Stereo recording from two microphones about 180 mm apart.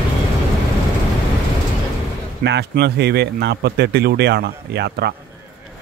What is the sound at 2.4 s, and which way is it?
Speech, 70° right (ahead or behind).